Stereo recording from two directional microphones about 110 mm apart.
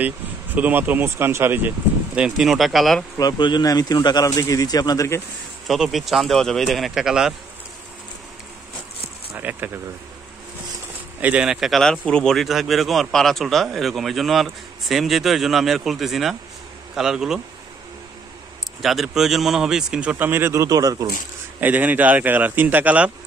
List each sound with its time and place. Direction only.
0.6 s speech: 15° right (ahead or behind)
2.1 s speech: 5° right (ahead or behind)
3.2 s speech: 40° left (ahead or behind)
5.7 s speech: centre (ahead or behind)
9.4 s speech: 15° right (ahead or behind)
11.1 s speech: 15° right (ahead or behind)
18.8 s speech: centre (ahead or behind)
20.2 s speech: 20° right (ahead or behind)
21.5 s speech: 15° right (ahead or behind)